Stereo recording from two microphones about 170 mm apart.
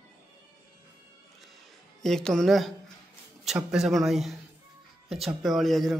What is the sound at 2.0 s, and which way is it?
Mantra, centre (ahead or behind).